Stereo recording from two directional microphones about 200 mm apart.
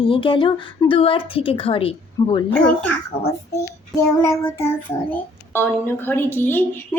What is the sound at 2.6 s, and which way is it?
A child's voice, 10° left (ahead or behind).